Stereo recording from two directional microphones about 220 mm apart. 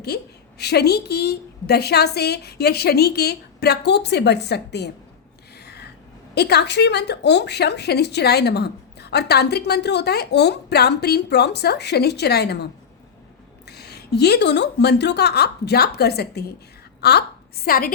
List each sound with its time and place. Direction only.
0.1 s speech: 50° left (ahead or behind)
5.5 s a sound: 50° left (ahead or behind)
6.3 s speech: 50° left (ahead or behind)
13.7 s a woman's voice: 45° left (ahead or behind)